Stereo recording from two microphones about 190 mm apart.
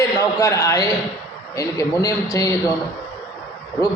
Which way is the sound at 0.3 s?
15° left (ahead or behind).